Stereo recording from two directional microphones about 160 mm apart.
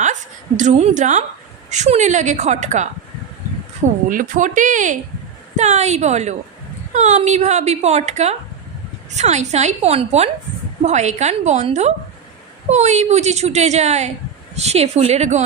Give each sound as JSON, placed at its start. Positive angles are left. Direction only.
{"t": 0.0, "sound": "a woman's voice", "side_deg": -50}
{"t": 4.1, "sound": "a woman's voice", "side_deg": -55}